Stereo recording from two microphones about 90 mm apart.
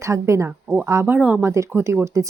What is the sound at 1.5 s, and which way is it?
Speech, 35° right (ahead or behind).